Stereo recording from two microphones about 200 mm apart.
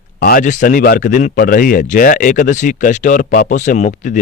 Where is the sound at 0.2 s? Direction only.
45° left (ahead or behind).